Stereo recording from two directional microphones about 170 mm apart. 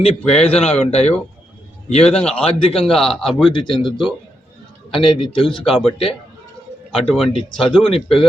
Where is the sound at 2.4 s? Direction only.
30° left (ahead or behind).